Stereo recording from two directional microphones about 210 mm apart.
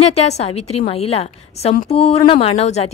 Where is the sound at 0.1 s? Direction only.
30° left (ahead or behind).